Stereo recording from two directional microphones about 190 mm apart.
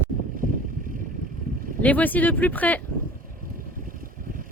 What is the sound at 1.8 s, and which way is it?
Speech, 10° left (ahead or behind).